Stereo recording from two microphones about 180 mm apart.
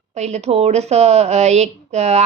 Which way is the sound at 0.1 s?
40° right (ahead or behind).